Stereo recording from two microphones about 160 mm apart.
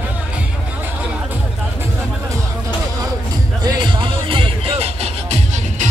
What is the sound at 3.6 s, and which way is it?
Music, 25° right (ahead or behind).